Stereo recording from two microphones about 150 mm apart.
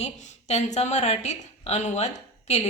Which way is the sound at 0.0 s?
50° left (ahead or behind).